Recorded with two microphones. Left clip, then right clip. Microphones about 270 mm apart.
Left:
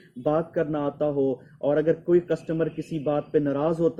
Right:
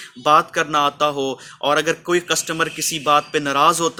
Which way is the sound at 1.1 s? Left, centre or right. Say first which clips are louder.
Right 3 dB; right.